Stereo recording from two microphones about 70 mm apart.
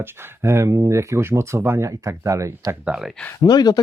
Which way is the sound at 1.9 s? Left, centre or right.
Right.